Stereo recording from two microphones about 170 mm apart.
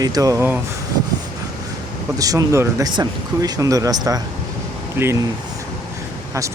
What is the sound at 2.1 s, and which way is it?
Speech, 20° right (ahead or behind).